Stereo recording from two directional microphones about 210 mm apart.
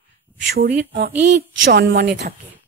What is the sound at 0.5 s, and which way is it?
A woman's voice, 50° right (ahead or behind).